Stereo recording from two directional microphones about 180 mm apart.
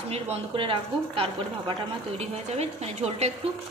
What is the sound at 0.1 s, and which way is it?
Speech, 30° right (ahead or behind).